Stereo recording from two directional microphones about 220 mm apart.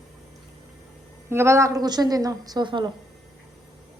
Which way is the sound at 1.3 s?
10° right (ahead or behind).